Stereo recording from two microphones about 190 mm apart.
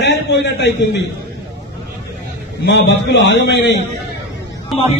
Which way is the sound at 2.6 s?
65° left (ahead or behind).